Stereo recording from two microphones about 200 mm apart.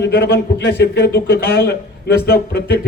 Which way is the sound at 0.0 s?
55° left (ahead or behind).